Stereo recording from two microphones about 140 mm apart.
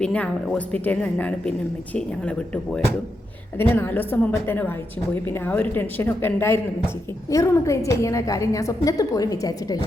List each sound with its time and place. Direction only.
0.0 s speech: 10° left (ahead or behind)
3.6 s a woman's voice: 15° left (ahead or behind)